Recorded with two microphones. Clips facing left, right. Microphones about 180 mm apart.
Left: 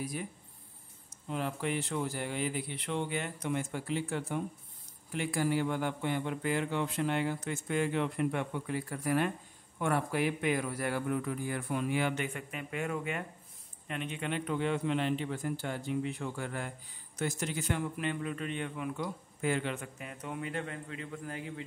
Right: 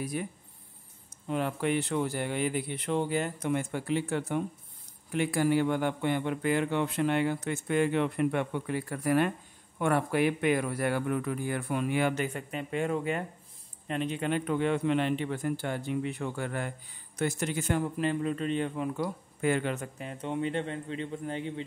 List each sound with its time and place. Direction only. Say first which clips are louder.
0.2 s a man's voice: right 5 dB; 60° right (ahead or behind); by 3.4 s 40° right (ahead or behind)
3.4 s a man's voice: right 4 dB; 60° right (ahead or behind)
12.1 s a man's voice: right 4 dB; 35° right (ahead or behind)
17.9 s speech: right 6 dB; 30° right (ahead or behind)
19.4 s a man's voice: right 4 dB; 50° right (ahead or behind); by 21.6 s 25° right (ahead or behind)